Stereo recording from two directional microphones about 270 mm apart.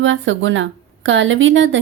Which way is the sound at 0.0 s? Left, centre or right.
Right.